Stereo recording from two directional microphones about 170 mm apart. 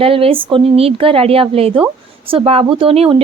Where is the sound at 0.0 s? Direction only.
35° right (ahead or behind).